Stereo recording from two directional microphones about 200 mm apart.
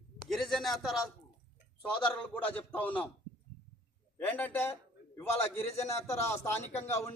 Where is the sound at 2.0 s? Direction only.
10° left (ahead or behind).